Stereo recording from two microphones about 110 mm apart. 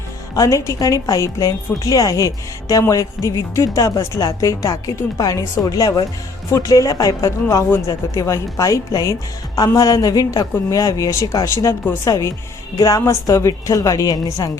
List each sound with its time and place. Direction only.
0.3 s speech: 30° left (ahead or behind)